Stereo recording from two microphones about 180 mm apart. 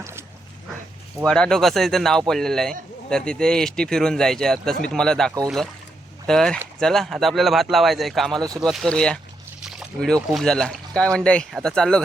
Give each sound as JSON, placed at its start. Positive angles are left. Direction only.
{"t": 1.2, "sound": "speech", "side_deg": 5}
{"t": 8.4, "sound": "speech", "side_deg": -20}
{"t": 8.6, "sound": "speech", "side_deg": 0}
{"t": 9.6, "sound": "a sound", "side_deg": 5}
{"t": 10.2, "sound": "speech", "side_deg": 0}